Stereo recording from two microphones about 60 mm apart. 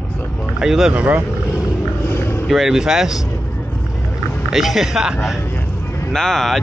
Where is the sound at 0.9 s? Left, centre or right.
Right.